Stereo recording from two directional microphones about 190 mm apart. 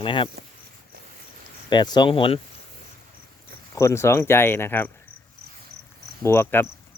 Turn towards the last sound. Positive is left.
turn(degrees=10)  # may be behind; listen again after turning